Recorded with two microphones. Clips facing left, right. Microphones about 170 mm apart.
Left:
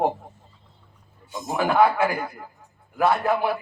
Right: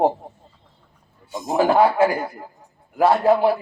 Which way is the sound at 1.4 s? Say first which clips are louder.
Right 3 dB; 30° right (ahead or behind).